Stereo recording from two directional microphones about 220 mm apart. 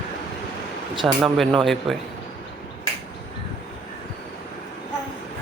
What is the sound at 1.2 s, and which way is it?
Speech, centre (ahead or behind).